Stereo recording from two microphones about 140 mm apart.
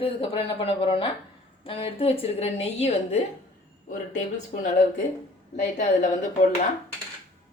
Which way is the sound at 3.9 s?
60° left (ahead or behind).